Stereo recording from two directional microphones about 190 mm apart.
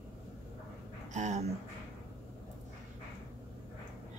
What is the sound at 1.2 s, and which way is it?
Speech, 40° right (ahead or behind).